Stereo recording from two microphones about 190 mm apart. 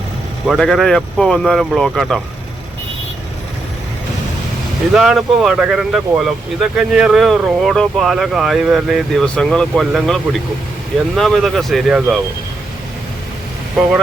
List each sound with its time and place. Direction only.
0.4 s speech: centre (ahead or behind)
4.9 s speech: centre (ahead or behind)